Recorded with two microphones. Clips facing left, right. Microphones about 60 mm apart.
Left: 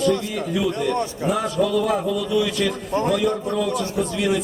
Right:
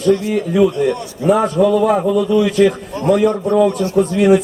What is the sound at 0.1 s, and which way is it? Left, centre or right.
A man's voice, right.